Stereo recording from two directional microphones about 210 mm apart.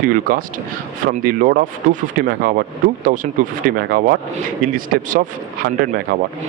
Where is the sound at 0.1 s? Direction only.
40° right (ahead or behind).